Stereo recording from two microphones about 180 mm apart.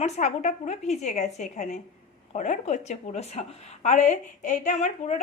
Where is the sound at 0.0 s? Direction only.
40° left (ahead or behind).